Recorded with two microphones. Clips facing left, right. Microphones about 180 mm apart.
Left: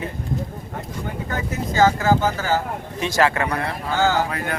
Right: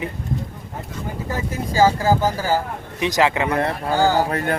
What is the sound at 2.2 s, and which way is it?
Speech, 15° right (ahead or behind).